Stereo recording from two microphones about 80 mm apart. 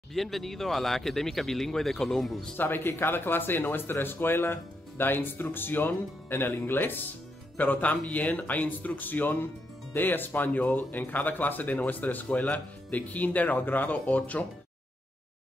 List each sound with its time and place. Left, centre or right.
0.1 s speech: centre
2.5 s speech: left